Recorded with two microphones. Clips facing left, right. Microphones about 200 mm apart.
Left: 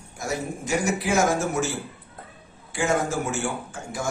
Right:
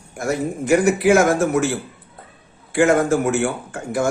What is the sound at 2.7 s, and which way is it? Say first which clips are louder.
A man's voice: right 9 dB; 60° right (ahead or behind).